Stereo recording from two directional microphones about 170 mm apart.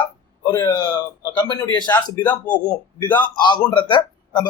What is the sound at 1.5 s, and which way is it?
Speech, 25° left (ahead or behind).